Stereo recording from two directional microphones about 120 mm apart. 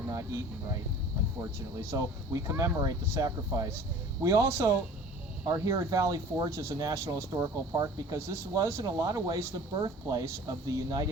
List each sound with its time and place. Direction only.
1.9 s speech: 25° right (ahead or behind)